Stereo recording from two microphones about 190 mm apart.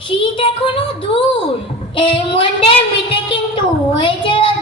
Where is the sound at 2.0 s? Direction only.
25° left (ahead or behind).